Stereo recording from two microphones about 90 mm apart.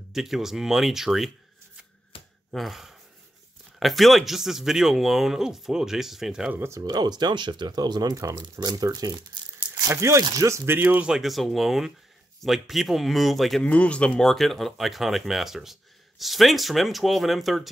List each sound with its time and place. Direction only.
0.1 s speech: 5° right (ahead or behind)
2.1 s a sound: 90° left
2.5 s speech: centre (ahead or behind)
6.5 s speech: 30° right (ahead or behind)
6.8 s speech: 50° right (ahead or behind)
9.9 s speech: 35° right (ahead or behind)
11.1 s speech: 5° right (ahead or behind)
13.7 s speech: 15° left (ahead or behind); by 17.6 s centre (ahead or behind)